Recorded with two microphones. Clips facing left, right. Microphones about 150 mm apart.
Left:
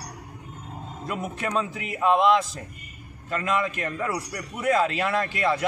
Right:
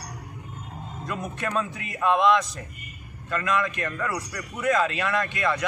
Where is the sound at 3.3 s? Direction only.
30° left (ahead or behind).